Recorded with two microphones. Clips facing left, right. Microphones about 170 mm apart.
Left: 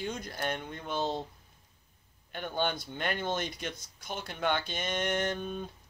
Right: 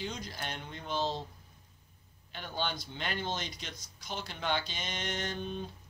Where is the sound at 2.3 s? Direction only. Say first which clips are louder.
Left 5 dB; 55° left (ahead or behind).